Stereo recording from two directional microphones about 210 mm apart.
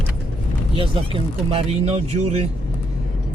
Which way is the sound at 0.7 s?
25° right (ahead or behind).